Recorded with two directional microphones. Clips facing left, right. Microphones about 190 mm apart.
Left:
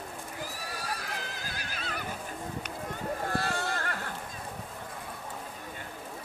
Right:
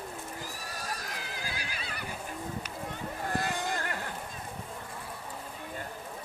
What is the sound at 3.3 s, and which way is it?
Boat, 15° right (ahead or behind).